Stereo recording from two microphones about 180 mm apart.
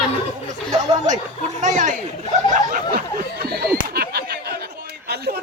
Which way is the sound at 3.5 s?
60° right (ahead or behind).